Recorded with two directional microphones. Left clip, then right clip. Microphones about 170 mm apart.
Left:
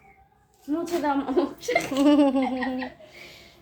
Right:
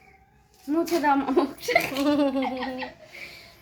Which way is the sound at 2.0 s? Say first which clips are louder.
Left 4 dB; 25° left (ahead or behind).